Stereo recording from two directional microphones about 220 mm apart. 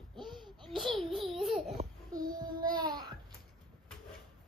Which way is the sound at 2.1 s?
15° right (ahead or behind).